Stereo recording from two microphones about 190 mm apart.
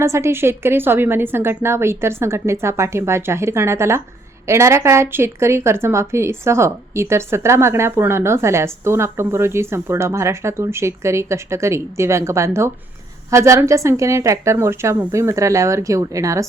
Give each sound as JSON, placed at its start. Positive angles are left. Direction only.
{"t": 0.0, "sound": "speech", "side_deg": -15}